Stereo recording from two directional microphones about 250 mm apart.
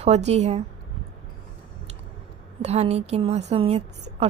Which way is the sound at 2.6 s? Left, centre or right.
Right.